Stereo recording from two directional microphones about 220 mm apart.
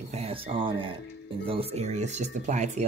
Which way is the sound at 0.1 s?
25° right (ahead or behind).